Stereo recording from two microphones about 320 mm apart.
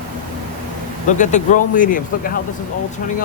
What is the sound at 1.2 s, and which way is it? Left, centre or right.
Speech, left.